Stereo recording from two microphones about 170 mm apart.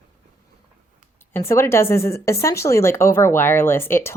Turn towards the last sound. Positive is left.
turn(degrees=15)  # may be behind; listen again after turning